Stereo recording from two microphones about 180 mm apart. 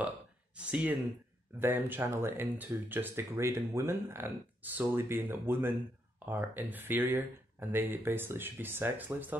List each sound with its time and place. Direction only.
0.6 s speech: 5° right (ahead or behind)